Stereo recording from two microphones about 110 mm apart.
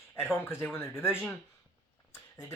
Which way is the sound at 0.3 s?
25° left (ahead or behind).